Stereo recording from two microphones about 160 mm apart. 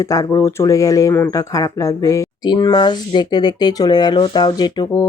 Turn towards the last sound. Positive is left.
turn(degrees=25)  # may be behind; listen again after turning